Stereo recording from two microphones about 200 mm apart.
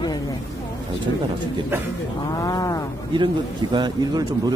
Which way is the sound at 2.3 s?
20° left (ahead or behind).